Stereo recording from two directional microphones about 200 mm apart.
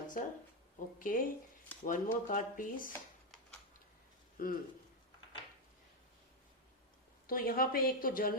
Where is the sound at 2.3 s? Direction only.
40° left (ahead or behind).